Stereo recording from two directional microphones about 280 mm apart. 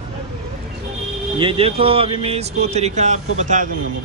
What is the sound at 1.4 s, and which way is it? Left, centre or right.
Speech, centre.